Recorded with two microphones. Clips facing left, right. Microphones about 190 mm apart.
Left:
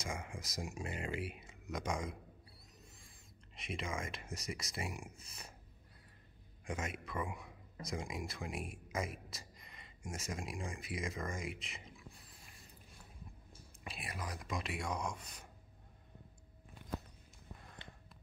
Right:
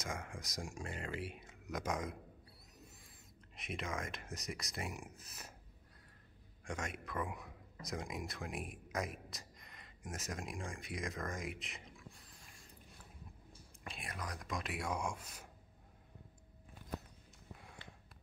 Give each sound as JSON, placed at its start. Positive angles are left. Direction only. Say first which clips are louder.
{"t": 0.0, "sound": "speech", "louder": "left 1 dB", "side_deg": 0}
{"t": 3.5, "sound": "speech", "louder": "left 1 dB", "side_deg": 0}
{"t": 6.6, "sound": "speech", "louder": "left 1 dB", "side_deg": 5}
{"t": 13.8, "sound": "speech", "louder": "left 1 dB", "side_deg": 5}
{"t": 17.6, "sound": "a sound", "louder": "even", "side_deg": -10}